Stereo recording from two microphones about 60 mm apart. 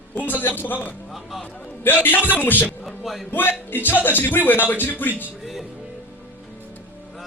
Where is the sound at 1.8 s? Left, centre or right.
Left.